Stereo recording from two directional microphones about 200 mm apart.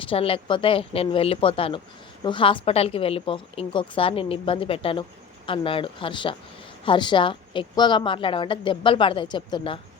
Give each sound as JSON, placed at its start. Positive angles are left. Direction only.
{"t": 0.0, "sound": "a woman's voice", "side_deg": 25}